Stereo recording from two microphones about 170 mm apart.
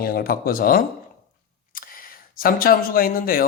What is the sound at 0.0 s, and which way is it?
Speech, 60° left (ahead or behind).